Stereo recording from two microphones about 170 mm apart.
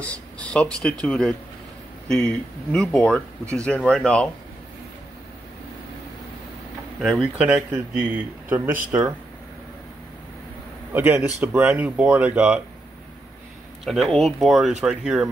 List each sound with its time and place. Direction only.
0.0 s speech: 5° left (ahead or behind)
7.0 s speech: 5° right (ahead or behind)
10.9 s speech: 10° right (ahead or behind)
13.8 s speech: centre (ahead or behind)